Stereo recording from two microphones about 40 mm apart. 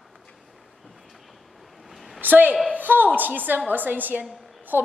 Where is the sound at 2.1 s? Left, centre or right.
Right.